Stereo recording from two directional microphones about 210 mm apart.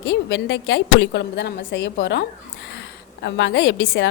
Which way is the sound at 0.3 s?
55° left (ahead or behind).